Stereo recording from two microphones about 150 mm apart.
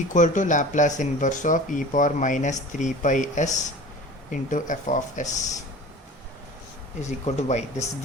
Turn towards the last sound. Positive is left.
turn(degrees=50)  # may be behind; listen again after turning